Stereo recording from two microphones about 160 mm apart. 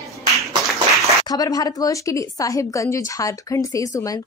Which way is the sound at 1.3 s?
25° left (ahead or behind).